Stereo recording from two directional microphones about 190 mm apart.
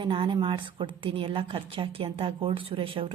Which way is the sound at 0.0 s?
25° right (ahead or behind).